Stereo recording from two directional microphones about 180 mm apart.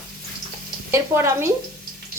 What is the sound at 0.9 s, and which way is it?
Speech, 15° right (ahead or behind).